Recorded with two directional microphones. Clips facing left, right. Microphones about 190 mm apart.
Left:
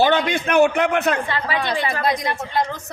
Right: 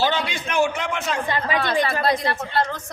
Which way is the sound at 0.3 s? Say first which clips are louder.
Left 6 dB; 60° left (ahead or behind).